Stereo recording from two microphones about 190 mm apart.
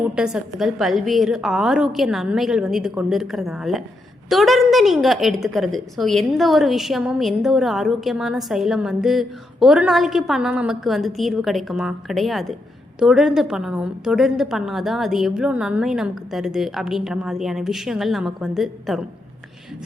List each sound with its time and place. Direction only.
0.1 s a woman's voice: 5° right (ahead or behind)